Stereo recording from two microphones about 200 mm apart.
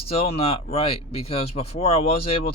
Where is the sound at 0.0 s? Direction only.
30° left (ahead or behind).